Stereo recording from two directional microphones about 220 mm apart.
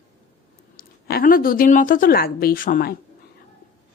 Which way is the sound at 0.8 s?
45° left (ahead or behind).